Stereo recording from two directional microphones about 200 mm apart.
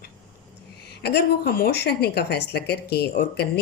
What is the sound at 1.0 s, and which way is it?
Speech, 55° left (ahead or behind).